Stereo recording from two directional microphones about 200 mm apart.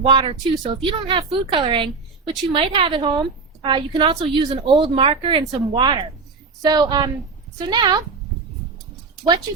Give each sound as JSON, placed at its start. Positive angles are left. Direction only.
{"t": 0.0, "sound": "a woman's voice", "side_deg": -25}